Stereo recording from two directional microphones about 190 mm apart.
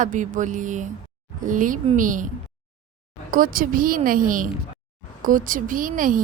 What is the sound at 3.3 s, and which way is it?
A woman's voice, 45° right (ahead or behind).